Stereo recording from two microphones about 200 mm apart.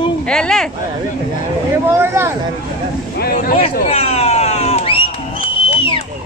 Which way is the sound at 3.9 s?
30° left (ahead or behind).